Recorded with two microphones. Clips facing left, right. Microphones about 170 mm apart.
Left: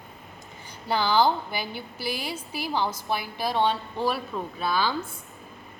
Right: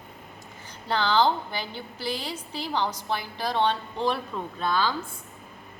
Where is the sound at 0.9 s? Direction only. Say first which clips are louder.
Left 1 dB; 10° left (ahead or behind).